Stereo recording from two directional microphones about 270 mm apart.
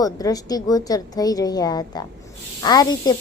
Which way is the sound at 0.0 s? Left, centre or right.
Centre.